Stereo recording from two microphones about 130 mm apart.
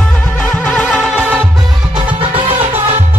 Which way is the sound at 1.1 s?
15° right (ahead or behind).